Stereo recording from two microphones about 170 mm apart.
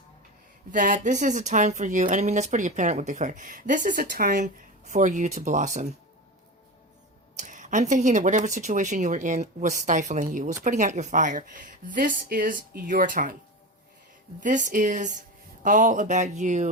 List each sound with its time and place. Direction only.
0.7 s speech: 50° right (ahead or behind)
7.3 s speech: 45° right (ahead or behind)
14.4 s speech: 50° right (ahead or behind)